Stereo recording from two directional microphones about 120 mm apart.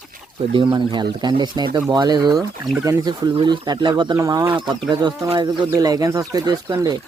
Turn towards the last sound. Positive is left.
turn(degrees=-35)  # may be behind; listen again after turning